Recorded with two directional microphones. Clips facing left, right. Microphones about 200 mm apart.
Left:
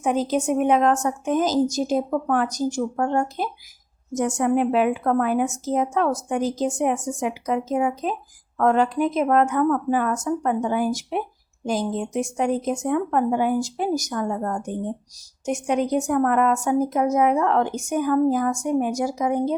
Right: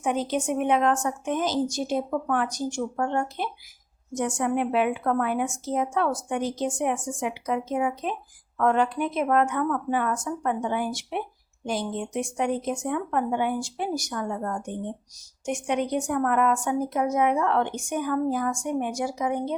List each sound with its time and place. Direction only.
0.0 s speech: 40° left (ahead or behind)